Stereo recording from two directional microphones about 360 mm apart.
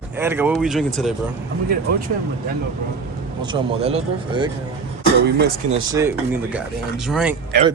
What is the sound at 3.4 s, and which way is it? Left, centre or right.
Speech, centre.